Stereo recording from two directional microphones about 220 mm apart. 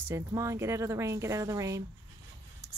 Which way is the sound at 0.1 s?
15° right (ahead or behind).